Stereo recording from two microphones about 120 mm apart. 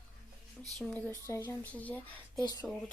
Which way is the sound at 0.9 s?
20° left (ahead or behind).